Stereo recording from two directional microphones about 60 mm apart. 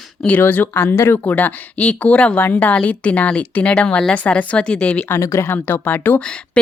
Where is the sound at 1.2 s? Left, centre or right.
Left.